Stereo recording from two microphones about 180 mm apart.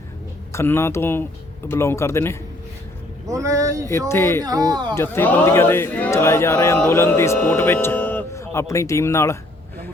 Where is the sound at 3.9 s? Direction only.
15° left (ahead or behind).